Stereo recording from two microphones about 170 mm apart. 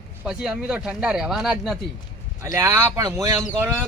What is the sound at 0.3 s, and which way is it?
Speech, 5° right (ahead or behind).